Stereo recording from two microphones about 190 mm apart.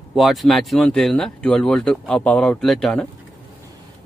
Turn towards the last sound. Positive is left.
turn(degrees=0)  # may be behind; listen again after turning